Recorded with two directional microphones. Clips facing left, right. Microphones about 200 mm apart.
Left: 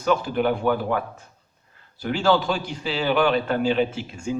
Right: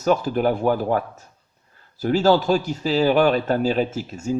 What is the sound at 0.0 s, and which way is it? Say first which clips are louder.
Speech: right 2 dB; 40° right (ahead or behind).